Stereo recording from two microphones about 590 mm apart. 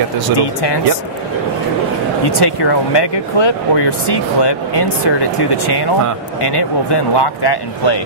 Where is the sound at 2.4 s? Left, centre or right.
Left.